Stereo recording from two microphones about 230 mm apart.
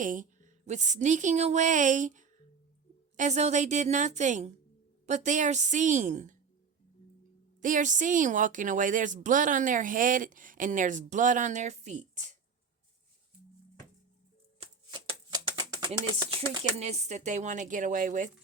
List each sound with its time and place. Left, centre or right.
0.0 s a woman's voice: right
7.6 s a woman's voice: right
14.6 s a sound: right
16.8 s a woman's voice: right